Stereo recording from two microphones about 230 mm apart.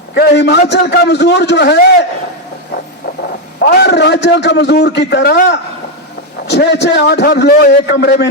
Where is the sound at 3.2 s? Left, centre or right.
Left.